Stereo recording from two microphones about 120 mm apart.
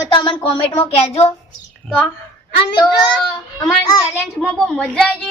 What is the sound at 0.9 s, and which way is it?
Speech, 55° left (ahead or behind).